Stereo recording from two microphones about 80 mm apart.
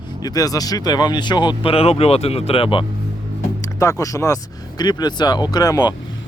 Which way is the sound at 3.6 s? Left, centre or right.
Left.